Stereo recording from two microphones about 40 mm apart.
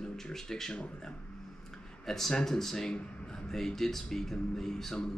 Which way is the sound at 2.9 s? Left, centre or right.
Left.